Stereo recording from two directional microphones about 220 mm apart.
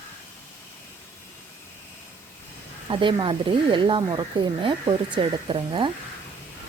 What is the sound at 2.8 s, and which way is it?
Speech, 20° right (ahead or behind).